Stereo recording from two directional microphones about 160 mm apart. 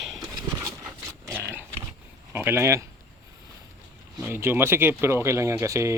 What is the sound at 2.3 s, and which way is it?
Speech, 15° right (ahead or behind).